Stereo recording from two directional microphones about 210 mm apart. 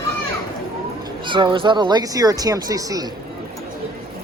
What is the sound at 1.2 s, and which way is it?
Speech, 20° right (ahead or behind).